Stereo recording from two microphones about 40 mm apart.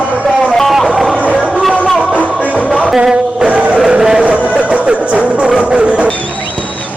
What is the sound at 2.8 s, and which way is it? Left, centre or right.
Music, centre.